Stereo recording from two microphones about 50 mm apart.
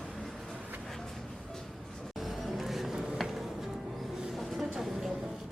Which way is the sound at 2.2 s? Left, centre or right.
Centre.